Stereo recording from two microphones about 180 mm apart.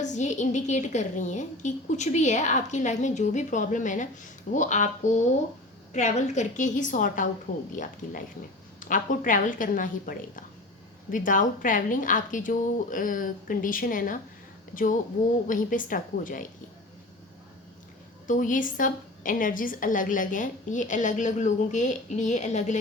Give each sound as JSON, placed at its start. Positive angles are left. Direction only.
{"t": 0.0, "sound": "a woman's voice", "side_deg": 40}
{"t": 8.8, "sound": "a woman's voice", "side_deg": 45}
{"t": 18.3, "sound": "a woman's voice", "side_deg": 45}